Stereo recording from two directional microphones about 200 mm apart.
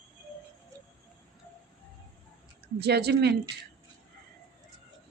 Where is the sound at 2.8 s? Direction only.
55° right (ahead or behind).